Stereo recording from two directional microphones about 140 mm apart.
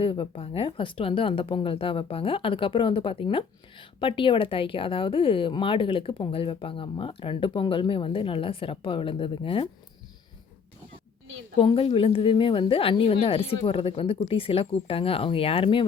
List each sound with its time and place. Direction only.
0.0 s a woman's voice: 40° left (ahead or behind)
11.5 s a woman's voice: 40° left (ahead or behind)